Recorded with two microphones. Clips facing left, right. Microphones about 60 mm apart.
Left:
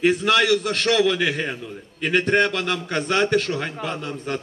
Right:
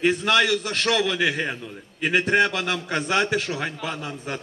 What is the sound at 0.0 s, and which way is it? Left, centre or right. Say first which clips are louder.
A man's voice: left 2 dB; centre.